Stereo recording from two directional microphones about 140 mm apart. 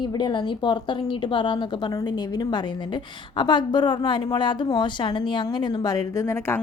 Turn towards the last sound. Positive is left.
turn(degrees=20)  # may be behind; listen again after turning